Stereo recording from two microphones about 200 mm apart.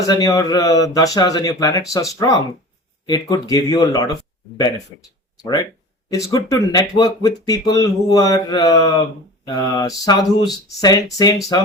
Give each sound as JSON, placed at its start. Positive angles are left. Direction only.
{"t": 0.1, "sound": "speech", "side_deg": 20}